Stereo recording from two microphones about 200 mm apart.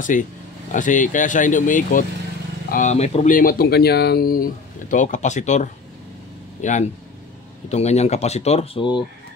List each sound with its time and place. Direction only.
0.1 s speech: 40° left (ahead or behind); by 9.0 s 25° left (ahead or behind)